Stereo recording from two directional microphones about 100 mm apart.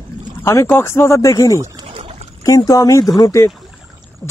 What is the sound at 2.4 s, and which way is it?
Speech, 35° left (ahead or behind).